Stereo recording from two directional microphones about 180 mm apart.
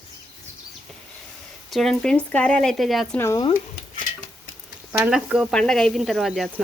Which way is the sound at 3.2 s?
15° left (ahead or behind).